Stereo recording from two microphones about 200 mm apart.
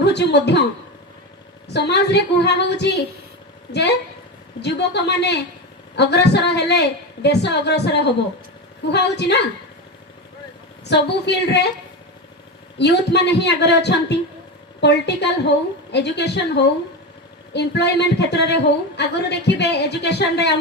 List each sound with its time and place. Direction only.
0.0 s a woman's voice: 55° left (ahead or behind)
1.6 s a woman's voice: 55° left (ahead or behind)
10.8 s a woman's voice: 60° left (ahead or behind)
12.8 s a woman's voice: 60° left (ahead or behind)